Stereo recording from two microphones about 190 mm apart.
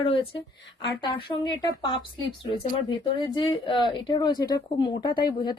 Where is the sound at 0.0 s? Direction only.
30° left (ahead or behind).